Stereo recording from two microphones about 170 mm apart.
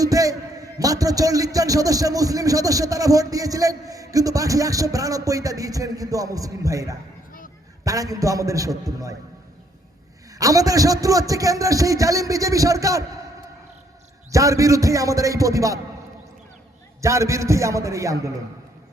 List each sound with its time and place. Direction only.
0.0 s a man's voice: 20° right (ahead or behind)
10.3 s a man's voice: 20° right (ahead or behind)
14.3 s a man's voice: 20° right (ahead or behind)
17.0 s a man's voice: 15° right (ahead or behind)